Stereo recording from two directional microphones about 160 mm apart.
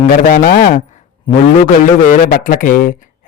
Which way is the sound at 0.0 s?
60° left (ahead or behind).